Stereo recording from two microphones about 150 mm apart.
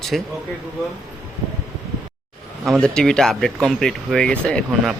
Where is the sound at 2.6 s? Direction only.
5° left (ahead or behind).